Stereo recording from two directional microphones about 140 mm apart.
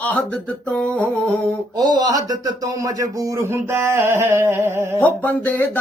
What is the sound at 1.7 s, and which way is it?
Speech, 30° right (ahead or behind).